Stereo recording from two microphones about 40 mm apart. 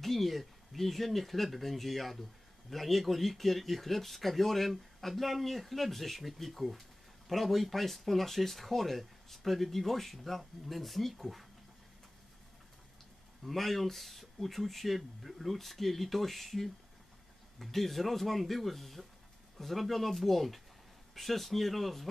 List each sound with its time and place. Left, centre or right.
0.0 s speech: centre
13.5 s speech: centre